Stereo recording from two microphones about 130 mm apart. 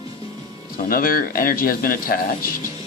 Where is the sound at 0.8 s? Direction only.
90° left.